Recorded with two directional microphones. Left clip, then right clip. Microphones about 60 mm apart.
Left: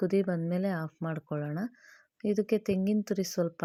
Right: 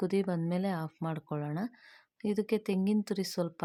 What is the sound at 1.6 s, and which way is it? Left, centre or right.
A woman's voice, left.